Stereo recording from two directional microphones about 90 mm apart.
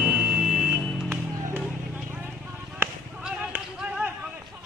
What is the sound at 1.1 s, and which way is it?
Run, 20° right (ahead or behind).